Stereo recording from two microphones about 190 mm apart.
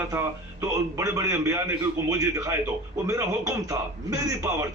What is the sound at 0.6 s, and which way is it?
Speech, 15° right (ahead or behind).